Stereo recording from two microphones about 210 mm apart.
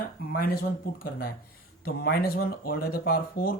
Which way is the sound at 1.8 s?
45° left (ahead or behind).